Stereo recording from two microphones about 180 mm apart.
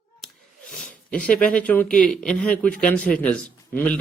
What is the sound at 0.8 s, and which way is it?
Speech, 5° left (ahead or behind).